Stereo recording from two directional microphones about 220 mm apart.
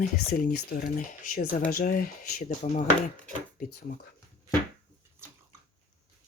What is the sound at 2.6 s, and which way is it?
Speech, 30° left (ahead or behind).